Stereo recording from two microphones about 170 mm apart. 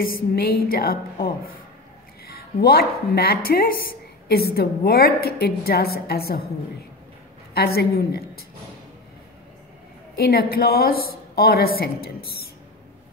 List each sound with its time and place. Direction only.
0.0 s a woman's voice: 60° left (ahead or behind)
7.5 s a woman's voice: 65° left (ahead or behind)
10.1 s a woman's voice: 65° left (ahead or behind)